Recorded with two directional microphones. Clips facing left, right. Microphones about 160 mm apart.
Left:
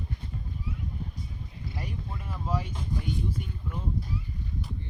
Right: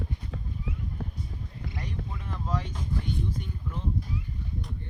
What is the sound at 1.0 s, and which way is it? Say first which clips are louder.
Clip-clop: right 2 dB; 90° right.